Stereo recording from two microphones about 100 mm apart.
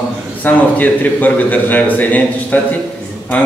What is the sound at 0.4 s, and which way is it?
A man's voice, 15° left (ahead or behind).